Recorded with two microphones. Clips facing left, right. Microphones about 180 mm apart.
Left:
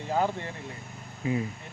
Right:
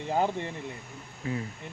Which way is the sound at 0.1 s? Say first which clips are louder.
Even; 20° right (ahead or behind).